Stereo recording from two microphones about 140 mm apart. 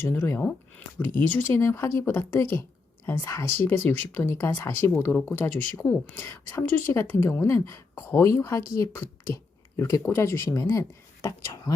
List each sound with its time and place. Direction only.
0.0 s speech: 15° left (ahead or behind)